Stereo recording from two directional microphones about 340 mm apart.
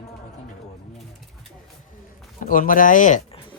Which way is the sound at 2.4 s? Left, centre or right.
Left.